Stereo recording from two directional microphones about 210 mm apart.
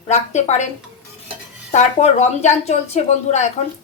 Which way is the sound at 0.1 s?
35° left (ahead or behind).